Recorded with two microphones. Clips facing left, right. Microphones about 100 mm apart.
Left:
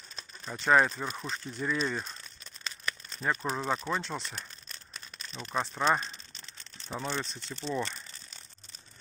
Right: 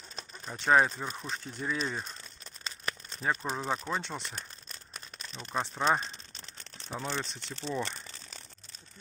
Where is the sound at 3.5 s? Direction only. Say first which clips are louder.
Left 1 dB; 10° right (ahead or behind).